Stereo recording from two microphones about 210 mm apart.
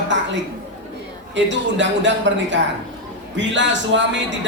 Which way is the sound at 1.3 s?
60° right (ahead or behind).